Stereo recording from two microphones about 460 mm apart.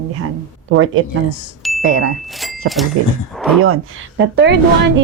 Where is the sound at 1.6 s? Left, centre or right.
Centre.